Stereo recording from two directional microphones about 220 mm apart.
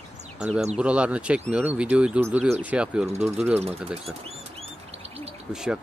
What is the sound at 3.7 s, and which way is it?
Speech, 25° right (ahead or behind).